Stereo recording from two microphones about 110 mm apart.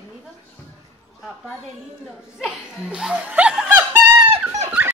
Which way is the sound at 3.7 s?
25° right (ahead or behind).